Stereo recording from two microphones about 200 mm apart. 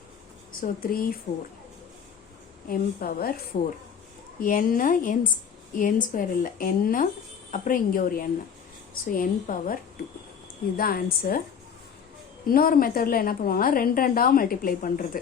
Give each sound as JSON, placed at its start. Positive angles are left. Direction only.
{"t": 0.6, "sound": "a woman's voice", "side_deg": 45}
{"t": 2.6, "sound": "a woman's voice", "side_deg": 50}
{"t": 10.8, "sound": "a woman's voice", "side_deg": 50}
{"t": 12.5, "sound": "a woman's voice", "side_deg": 45}